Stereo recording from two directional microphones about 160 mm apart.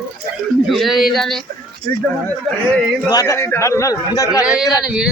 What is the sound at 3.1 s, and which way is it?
A man's voice, 20° left (ahead or behind).